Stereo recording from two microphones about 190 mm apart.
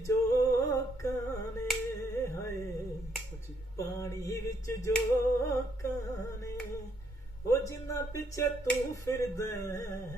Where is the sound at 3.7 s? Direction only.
15° left (ahead or behind).